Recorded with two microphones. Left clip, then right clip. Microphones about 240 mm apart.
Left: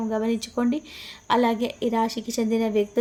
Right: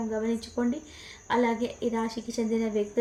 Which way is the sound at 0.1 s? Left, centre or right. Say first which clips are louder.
Left 5 dB; left.